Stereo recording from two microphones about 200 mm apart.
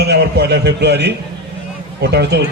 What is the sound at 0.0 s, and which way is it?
A man's voice, 55° right (ahead or behind).